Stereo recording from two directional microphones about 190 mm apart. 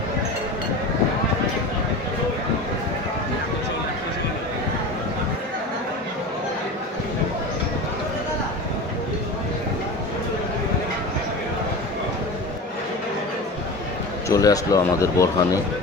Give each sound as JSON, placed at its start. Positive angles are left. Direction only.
{"t": 14.3, "sound": "a man's voice", "side_deg": 20}